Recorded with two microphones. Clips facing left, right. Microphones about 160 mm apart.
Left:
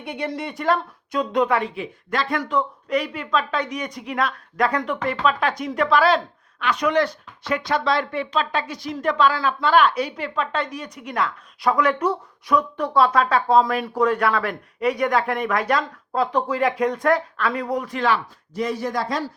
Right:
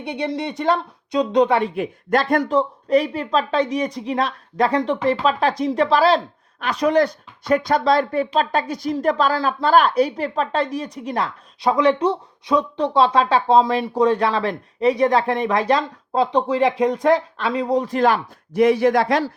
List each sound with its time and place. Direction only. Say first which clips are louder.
0.1 s speech: right 3 dB; 20° right (ahead or behind)
1.7 s speech: right 7 dB; 45° right (ahead or behind)
2.5 s speech: right 5 dB; 30° right (ahead or behind)
18.0 s speech: right 4 dB; 55° right (ahead or behind); by 19.3 s 70° right (ahead or behind)